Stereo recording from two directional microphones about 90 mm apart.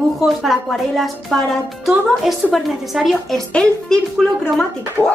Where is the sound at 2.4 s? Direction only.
Centre (ahead or behind).